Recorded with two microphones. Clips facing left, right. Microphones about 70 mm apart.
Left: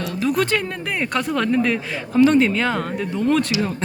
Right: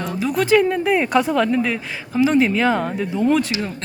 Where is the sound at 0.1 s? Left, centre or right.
Centre.